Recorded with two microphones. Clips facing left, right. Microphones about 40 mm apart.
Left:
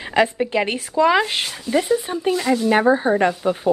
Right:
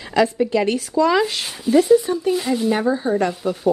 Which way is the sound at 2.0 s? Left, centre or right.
Left.